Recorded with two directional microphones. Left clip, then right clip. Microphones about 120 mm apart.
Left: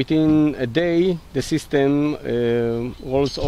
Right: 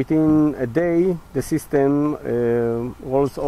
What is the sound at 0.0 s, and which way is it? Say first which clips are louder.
Speech: even; 35° left (ahead or behind).